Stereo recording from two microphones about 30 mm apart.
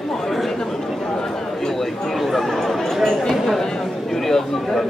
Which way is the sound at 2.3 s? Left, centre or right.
Centre.